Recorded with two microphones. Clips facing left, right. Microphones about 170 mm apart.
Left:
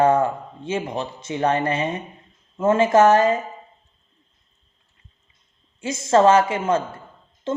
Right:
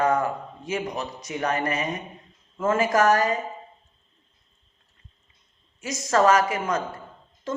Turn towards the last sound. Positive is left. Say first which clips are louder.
# left 5 dB
turn(degrees=25)  # may be behind; listen again after turning